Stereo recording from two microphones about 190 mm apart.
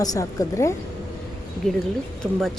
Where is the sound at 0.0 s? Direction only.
20° left (ahead or behind).